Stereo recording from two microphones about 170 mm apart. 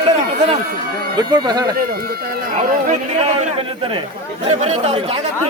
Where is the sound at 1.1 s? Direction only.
25° right (ahead or behind).